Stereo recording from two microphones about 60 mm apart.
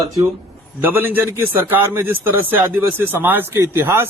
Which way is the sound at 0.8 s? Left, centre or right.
Right.